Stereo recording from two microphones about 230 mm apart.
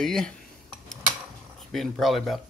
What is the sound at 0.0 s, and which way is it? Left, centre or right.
Cutlery, centre.